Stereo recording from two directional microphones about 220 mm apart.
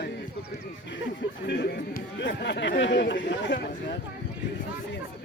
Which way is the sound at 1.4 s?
50° left (ahead or behind).